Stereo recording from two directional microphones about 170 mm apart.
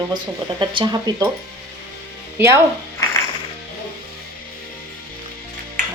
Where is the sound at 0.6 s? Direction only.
25° right (ahead or behind).